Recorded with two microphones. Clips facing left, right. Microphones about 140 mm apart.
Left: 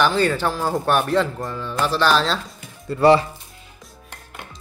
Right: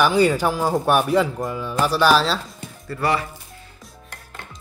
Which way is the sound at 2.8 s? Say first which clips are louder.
Left 8 dB; 25° left (ahead or behind).